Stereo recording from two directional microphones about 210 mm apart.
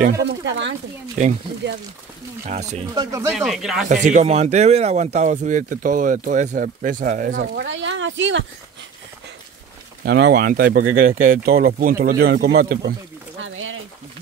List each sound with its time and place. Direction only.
0.2 s a sound: 55° right (ahead or behind)
2.4 s speech: 35° right (ahead or behind)
2.9 s speech: 15° right (ahead or behind)
3.3 s speech: centre (ahead or behind)
3.9 s speech: 35° right (ahead or behind)
7.5 s speech: 60° right (ahead or behind)
10.0 s speech: 50° right (ahead or behind)
13.4 s a sound: 70° right (ahead or behind)